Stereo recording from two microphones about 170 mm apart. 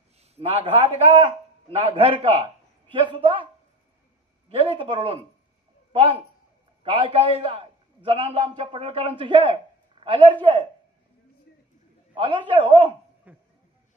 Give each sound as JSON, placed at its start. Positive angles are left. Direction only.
{"t": 0.2, "sound": "a man's voice", "side_deg": -35}
{"t": 4.5, "sound": "a man's voice", "side_deg": -35}
{"t": 6.8, "sound": "a man's voice", "side_deg": -35}
{"t": 12.1, "sound": "a man's voice", "side_deg": -30}
{"t": 13.3, "sound": "a sound", "side_deg": -10}